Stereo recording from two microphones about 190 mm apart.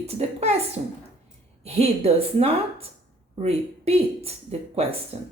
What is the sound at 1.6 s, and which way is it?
Speech, 35° right (ahead or behind).